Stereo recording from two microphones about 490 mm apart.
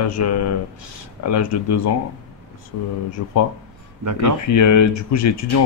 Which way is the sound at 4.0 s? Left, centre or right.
Right.